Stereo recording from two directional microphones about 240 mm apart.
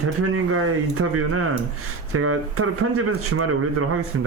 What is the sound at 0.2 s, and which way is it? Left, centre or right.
Speech, right.